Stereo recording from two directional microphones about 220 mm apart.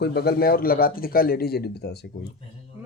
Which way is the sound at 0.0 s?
45° left (ahead or behind).